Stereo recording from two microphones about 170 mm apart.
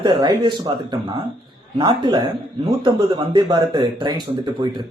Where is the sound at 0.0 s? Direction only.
25° right (ahead or behind).